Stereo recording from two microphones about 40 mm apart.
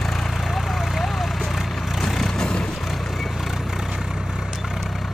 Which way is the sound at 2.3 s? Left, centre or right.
Left.